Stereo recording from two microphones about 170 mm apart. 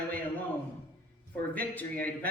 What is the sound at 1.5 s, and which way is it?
Speech, 10° left (ahead or behind).